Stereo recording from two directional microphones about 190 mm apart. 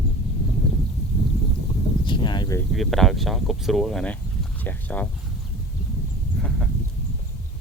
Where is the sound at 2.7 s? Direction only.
Centre (ahead or behind).